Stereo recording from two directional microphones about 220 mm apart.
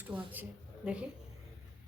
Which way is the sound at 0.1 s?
5° right (ahead or behind).